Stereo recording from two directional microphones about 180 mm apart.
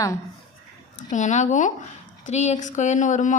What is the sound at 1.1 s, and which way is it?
A woman's voice, 40° left (ahead or behind).